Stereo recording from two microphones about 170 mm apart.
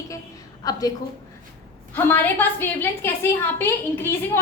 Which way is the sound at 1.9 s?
10° left (ahead or behind).